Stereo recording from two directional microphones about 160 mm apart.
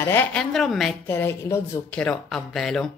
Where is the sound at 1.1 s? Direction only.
15° left (ahead or behind).